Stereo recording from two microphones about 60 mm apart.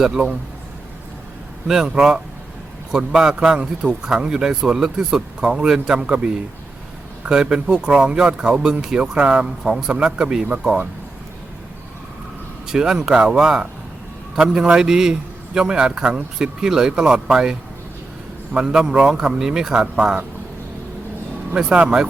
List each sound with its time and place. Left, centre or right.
0.0 s speech: centre
1.6 s speech: centre
12.6 s speech: centre
21.5 s speech: centre